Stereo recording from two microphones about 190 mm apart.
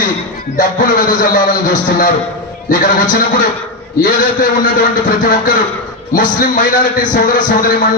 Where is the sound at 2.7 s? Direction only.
45° left (ahead or behind).